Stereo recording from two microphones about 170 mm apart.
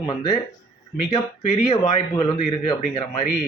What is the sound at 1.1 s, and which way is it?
A man's voice, 40° left (ahead or behind).